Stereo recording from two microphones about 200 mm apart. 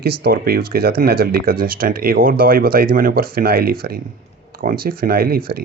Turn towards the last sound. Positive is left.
turn(degrees=-50)  # may be behind; listen again after turning